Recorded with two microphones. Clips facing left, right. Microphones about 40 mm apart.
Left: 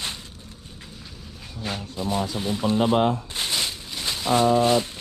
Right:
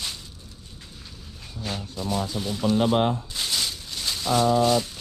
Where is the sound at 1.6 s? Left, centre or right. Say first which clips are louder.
Left 2 dB; centre.